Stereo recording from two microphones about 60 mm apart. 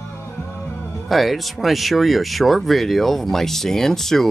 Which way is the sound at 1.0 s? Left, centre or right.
Centre.